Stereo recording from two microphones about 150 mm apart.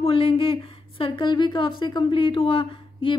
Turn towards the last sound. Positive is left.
turn(degrees=35)  # may be behind; listen again after turning